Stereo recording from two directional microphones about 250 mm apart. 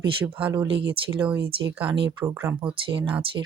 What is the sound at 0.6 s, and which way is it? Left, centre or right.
Speech, right.